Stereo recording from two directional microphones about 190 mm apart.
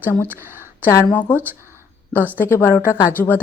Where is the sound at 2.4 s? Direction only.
10° left (ahead or behind).